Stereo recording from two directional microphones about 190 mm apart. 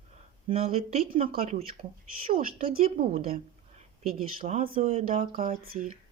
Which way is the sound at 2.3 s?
45° right (ahead or behind).